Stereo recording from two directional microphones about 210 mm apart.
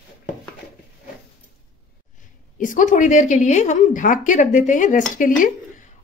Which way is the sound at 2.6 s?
35° left (ahead or behind).